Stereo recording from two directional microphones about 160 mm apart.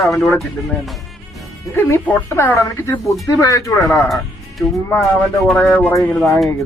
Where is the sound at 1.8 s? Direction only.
15° left (ahead or behind).